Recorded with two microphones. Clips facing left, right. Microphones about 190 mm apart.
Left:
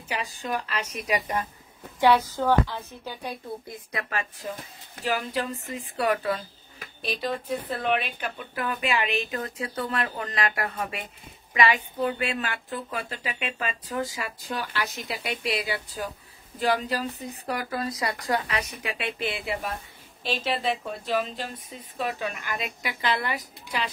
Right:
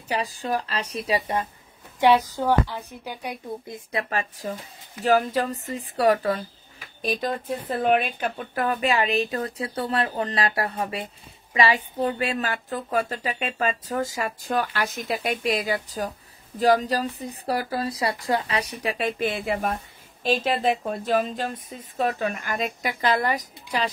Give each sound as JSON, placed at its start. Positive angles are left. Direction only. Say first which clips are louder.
{"t": 0.1, "sound": "speech", "louder": "right 4 dB", "side_deg": -35}
{"t": 2.0, "sound": "a woman's voice", "louder": "right 2 dB", "side_deg": -15}